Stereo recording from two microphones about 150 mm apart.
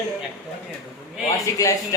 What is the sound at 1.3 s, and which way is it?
Speech, 20° left (ahead or behind).